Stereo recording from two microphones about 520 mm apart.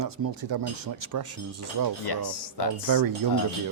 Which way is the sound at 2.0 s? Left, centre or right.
Left.